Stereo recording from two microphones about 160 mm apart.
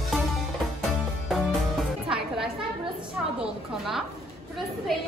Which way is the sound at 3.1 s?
Centre (ahead or behind).